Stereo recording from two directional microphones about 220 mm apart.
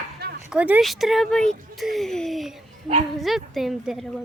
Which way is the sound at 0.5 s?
5° right (ahead or behind).